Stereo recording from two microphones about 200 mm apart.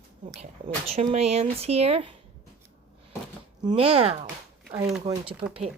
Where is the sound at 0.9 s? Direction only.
30° right (ahead or behind).